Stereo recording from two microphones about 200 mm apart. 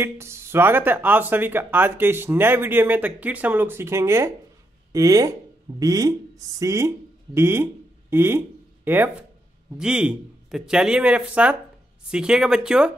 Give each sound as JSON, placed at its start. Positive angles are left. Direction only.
{"t": 0.0, "sound": "speech", "side_deg": -15}